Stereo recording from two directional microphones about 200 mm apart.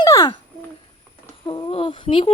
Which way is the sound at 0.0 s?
20° left (ahead or behind).